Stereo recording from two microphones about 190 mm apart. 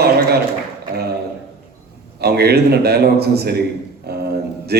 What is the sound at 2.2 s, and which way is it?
A man's voice, 55° right (ahead or behind).